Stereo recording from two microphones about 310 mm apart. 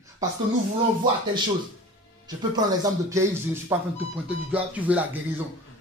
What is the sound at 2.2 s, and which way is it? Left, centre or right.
Speech, centre.